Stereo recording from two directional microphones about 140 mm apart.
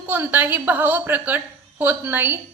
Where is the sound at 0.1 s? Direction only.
15° right (ahead or behind).